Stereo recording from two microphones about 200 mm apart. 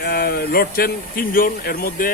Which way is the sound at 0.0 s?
50° left (ahead or behind).